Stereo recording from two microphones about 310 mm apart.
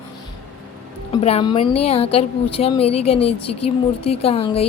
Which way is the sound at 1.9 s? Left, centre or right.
Centre.